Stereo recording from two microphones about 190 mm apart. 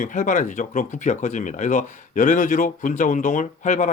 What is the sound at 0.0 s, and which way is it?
Speech, 40° left (ahead or behind).